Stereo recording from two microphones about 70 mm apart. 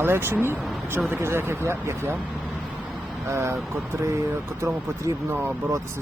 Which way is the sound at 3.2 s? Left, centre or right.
Right.